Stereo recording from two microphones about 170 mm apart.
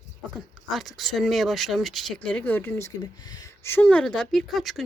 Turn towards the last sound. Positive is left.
turn(degrees=0)  # may be behind; listen again after turning